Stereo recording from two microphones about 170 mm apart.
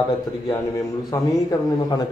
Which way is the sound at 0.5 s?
20° left (ahead or behind).